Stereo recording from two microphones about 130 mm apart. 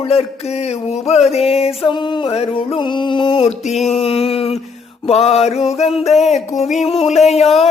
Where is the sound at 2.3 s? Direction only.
50° left (ahead or behind).